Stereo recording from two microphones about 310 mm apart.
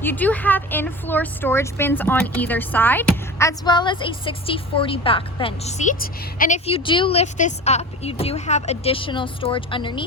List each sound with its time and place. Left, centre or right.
0.0 s a woman's voice: centre